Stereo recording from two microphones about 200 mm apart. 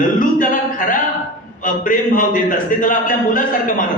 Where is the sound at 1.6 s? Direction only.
45° left (ahead or behind).